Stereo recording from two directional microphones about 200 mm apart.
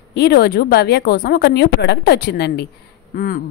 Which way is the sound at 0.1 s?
55° left (ahead or behind).